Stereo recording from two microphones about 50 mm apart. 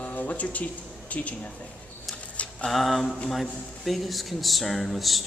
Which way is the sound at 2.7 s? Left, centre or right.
Centre.